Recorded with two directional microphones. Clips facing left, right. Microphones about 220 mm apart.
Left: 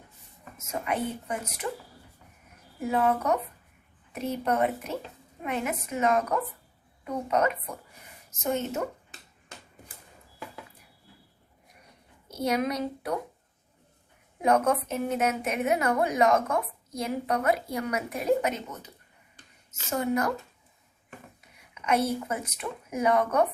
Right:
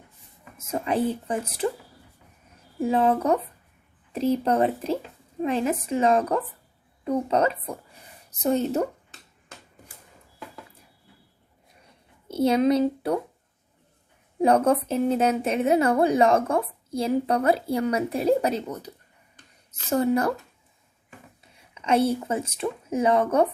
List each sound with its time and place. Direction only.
0.5 s a woman's voice: 30° right (ahead or behind)
2.7 s a woman's voice: 30° right (ahead or behind)
12.3 s speech: 30° right (ahead or behind)
14.4 s a woman's voice: 30° right (ahead or behind)
19.9 s a woman's voice: 30° right (ahead or behind)
21.4 s speech: 30° right (ahead or behind)